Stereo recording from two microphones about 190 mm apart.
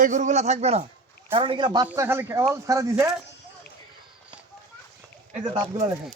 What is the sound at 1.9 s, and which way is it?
Speech, 10° right (ahead or behind).